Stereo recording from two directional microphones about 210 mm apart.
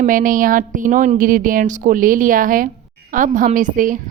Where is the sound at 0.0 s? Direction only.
40° right (ahead or behind).